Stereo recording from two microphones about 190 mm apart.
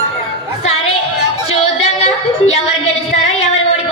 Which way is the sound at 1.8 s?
35° left (ahead or behind).